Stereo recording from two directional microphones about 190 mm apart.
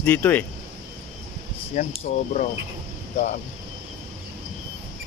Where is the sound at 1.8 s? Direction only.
40° left (ahead or behind).